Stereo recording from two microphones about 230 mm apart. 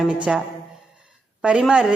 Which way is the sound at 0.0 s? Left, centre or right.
Centre.